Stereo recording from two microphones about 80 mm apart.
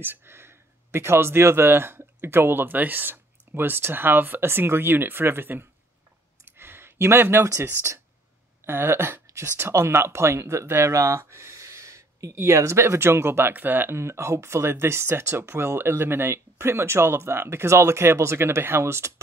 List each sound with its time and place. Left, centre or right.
0.0 s speech: right
6.4 s a sound: right
8.6 s speech: right